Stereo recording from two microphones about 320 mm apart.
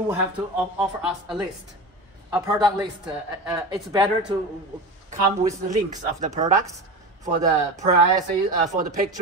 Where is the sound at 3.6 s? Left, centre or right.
Centre.